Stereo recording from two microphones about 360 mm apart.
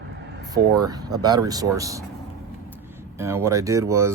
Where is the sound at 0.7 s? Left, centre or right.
Centre.